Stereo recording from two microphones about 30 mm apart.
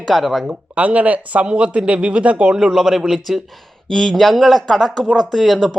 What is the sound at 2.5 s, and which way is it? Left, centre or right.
Speech, centre.